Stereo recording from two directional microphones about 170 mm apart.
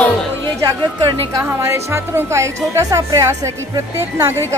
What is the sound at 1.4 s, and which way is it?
A woman's voice, 15° right (ahead or behind).